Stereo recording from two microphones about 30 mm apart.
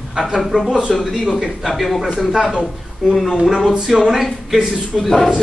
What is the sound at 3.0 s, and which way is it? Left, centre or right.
Speech, centre.